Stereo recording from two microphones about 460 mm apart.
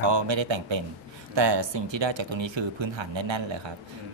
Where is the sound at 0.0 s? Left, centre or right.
Right.